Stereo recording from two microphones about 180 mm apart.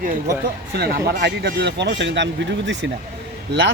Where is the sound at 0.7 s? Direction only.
65° right (ahead or behind).